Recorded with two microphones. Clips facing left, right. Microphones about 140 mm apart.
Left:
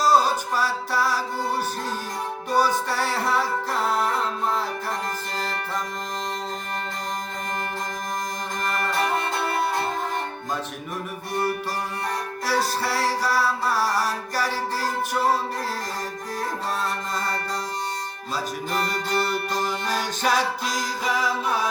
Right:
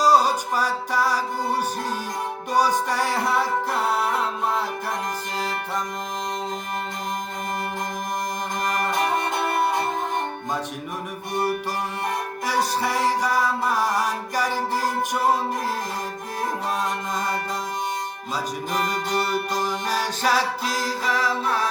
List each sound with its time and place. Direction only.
0.0 s music: 15° right (ahead or behind)
2.5 s music: 15° right (ahead or behind)
8.9 s music: 20° right (ahead or behind)
12.5 s music: 15° right (ahead or behind)
18.8 s music: 10° right (ahead or behind)